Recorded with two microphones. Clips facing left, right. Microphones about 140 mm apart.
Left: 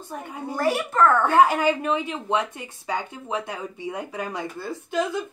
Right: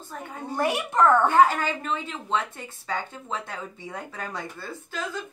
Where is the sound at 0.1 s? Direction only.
15° left (ahead or behind).